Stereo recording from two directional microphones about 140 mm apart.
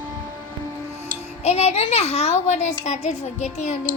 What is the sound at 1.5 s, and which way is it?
A child's voice, 50° left (ahead or behind).